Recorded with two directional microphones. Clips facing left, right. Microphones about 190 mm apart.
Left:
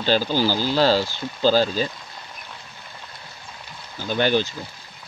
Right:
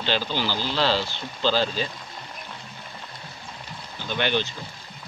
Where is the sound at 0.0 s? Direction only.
40° left (ahead or behind).